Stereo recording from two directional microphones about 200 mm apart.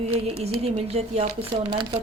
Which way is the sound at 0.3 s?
30° right (ahead or behind).